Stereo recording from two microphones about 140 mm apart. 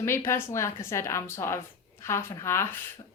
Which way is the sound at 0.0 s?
20° left (ahead or behind).